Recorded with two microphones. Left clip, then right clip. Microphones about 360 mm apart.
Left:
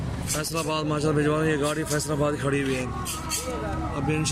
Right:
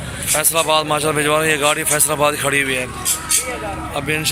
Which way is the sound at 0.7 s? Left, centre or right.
Centre.